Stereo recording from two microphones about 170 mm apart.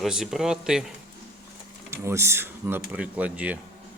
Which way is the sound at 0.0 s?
Centre (ahead or behind).